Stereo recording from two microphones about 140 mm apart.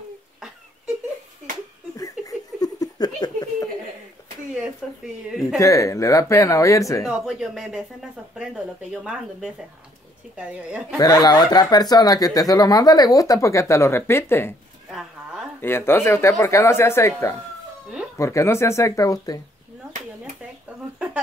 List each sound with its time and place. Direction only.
2.0 s giggle: 25° left (ahead or behind)
4.8 s speech: centre (ahead or behind)
5.6 s speech: 25° left (ahead or behind)
7.1 s speech: 5° right (ahead or behind)
11.0 s speech: 25° left (ahead or behind)
14.9 s a sound: 5° right (ahead or behind)
15.6 s speech: 15° left (ahead or behind)